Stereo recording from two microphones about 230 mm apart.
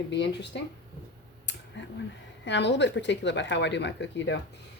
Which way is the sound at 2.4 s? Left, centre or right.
Left.